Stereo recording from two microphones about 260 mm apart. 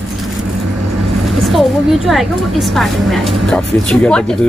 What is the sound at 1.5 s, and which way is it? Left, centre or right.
A woman's voice, centre.